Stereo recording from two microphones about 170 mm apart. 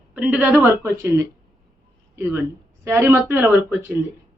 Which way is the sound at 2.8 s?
15° right (ahead or behind).